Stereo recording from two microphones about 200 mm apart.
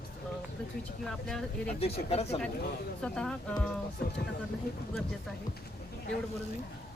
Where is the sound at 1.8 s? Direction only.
30° left (ahead or behind).